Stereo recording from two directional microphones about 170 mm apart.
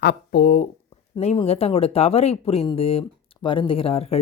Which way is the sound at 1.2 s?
40° left (ahead or behind).